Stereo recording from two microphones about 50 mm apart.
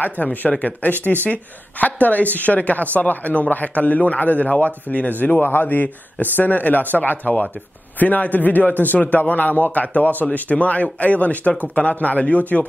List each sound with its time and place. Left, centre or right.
0.0 s a woman's voice: left